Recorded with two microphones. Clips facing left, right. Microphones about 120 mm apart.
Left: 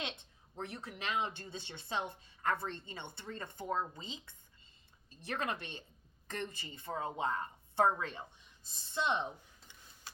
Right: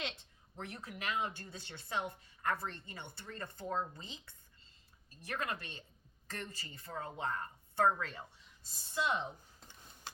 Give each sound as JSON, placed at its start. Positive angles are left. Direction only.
{"t": 0.5, "sound": "speech", "side_deg": 30}
{"t": 5.2, "sound": "speech", "side_deg": 30}